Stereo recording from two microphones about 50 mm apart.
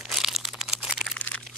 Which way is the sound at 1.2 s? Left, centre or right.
Left.